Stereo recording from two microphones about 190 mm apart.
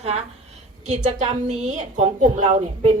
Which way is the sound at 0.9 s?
35° right (ahead or behind).